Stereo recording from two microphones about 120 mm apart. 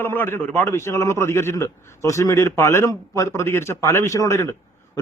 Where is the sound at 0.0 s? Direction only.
20° left (ahead or behind).